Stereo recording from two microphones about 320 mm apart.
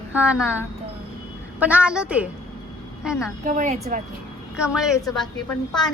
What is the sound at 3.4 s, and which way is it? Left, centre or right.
Speech, right.